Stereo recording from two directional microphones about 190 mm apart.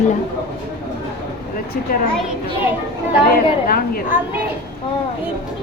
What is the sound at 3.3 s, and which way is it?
Speech, 50° left (ahead or behind).